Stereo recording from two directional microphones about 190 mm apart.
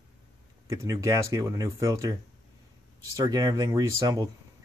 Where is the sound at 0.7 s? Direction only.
15° right (ahead or behind).